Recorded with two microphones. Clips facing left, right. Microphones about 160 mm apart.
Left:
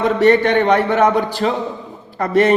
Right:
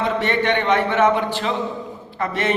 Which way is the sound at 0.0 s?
40° left (ahead or behind).